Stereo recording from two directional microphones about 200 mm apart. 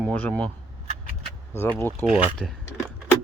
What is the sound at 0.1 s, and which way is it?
Speech, 5° left (ahead or behind).